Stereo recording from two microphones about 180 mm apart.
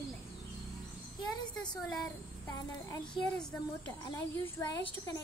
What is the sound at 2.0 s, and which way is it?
A woman's voice, 20° left (ahead or behind).